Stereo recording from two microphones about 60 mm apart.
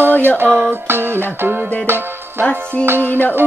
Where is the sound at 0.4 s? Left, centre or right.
Right.